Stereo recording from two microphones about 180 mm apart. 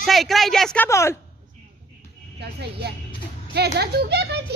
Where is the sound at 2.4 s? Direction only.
70° right (ahead or behind).